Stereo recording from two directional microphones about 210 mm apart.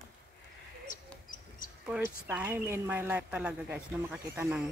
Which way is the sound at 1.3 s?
40° left (ahead or behind).